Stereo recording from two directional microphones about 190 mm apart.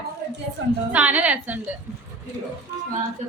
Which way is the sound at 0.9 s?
10° right (ahead or behind).